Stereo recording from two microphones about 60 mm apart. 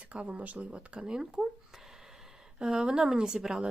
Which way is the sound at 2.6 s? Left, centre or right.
Centre.